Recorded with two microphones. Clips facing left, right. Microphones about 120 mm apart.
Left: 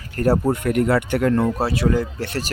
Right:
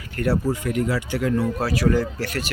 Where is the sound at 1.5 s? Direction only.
25° left (ahead or behind).